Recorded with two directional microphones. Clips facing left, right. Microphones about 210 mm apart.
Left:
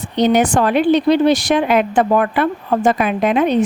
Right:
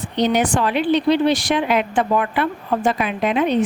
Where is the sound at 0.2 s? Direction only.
45° left (ahead or behind).